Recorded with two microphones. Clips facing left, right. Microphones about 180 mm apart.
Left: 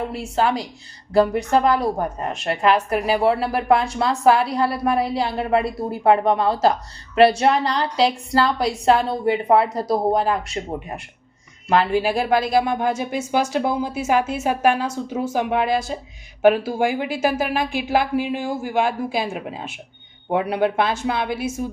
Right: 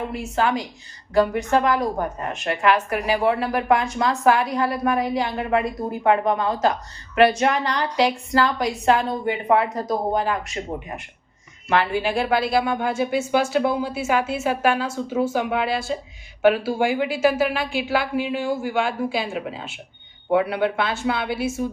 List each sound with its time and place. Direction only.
0.1 s a woman's voice: 35° left (ahead or behind)